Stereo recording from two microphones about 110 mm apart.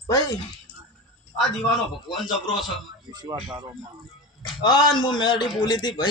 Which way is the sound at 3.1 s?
40° right (ahead or behind).